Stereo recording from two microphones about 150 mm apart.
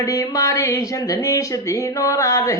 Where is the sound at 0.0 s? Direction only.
25° left (ahead or behind).